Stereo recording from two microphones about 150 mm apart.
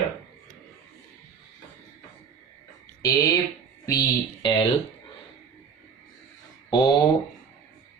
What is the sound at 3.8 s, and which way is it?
Speech, 25° left (ahead or behind).